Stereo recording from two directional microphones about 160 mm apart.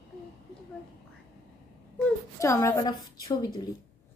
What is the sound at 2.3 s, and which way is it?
Speech, 20° left (ahead or behind).